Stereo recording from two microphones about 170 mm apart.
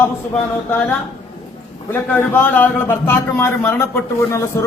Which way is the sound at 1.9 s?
10° left (ahead or behind).